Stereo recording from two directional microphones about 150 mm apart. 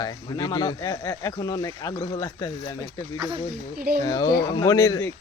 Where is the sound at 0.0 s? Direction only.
25° left (ahead or behind).